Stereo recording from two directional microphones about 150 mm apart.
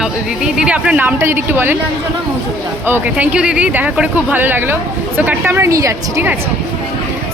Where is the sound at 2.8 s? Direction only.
15° right (ahead or behind).